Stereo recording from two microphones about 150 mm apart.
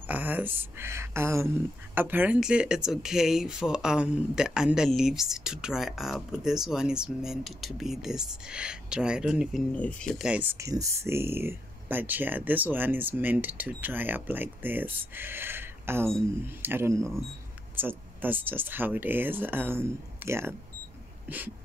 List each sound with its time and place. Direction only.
0.0 s speech: 10° right (ahead or behind)
9.8 s speech: 10° left (ahead or behind)
10.1 s speech: 5° right (ahead or behind)